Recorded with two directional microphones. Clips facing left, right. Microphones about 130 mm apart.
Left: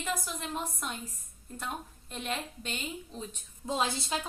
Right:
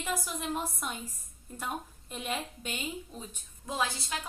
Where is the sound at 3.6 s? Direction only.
25° left (ahead or behind).